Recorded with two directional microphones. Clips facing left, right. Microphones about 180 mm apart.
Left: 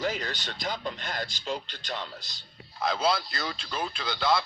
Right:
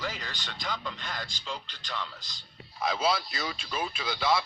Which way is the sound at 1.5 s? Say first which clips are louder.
Left 5 dB; 45° left (ahead or behind).